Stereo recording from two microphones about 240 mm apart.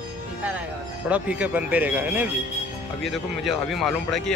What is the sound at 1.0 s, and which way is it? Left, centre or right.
Speech, centre.